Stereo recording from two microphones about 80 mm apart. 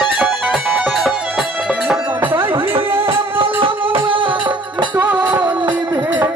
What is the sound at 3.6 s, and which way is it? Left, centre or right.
Music, right.